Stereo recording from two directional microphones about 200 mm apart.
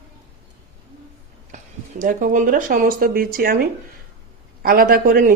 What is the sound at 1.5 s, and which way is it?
Speech, 40° right (ahead or behind).